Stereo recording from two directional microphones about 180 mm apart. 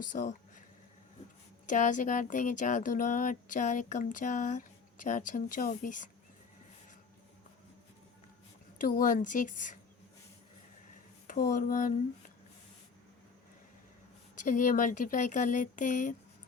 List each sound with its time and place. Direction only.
0.0 s speech: 50° left (ahead or behind)
1.6 s speech: 45° left (ahead or behind)
8.8 s speech: 45° left (ahead or behind)
11.3 s speech: 50° left (ahead or behind)
14.3 s speech: 45° left (ahead or behind)